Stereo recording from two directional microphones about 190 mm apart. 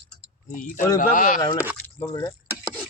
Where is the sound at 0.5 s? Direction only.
45° left (ahead or behind).